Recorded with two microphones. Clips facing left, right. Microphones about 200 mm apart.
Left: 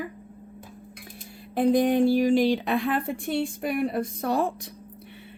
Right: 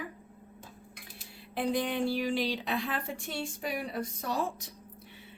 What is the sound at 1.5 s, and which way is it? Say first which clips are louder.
A woman's voice: left 10 dB; 45° left (ahead or behind).